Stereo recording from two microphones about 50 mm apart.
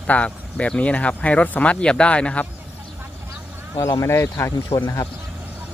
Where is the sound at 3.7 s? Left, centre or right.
Left.